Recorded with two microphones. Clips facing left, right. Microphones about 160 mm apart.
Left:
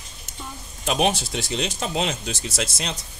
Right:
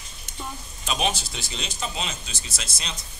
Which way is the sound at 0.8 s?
65° left (ahead or behind).